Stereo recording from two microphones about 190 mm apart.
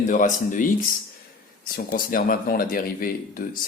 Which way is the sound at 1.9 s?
50° left (ahead or behind).